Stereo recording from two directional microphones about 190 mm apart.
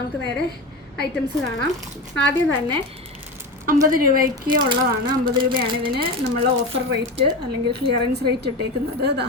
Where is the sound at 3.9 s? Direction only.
50° right (ahead or behind).